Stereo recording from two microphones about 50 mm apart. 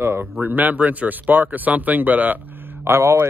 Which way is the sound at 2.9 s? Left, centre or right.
Right.